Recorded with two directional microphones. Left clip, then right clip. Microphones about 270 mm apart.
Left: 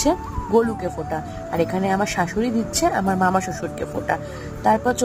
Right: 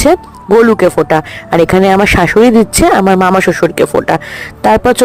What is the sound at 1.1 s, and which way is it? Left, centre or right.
Speech, right.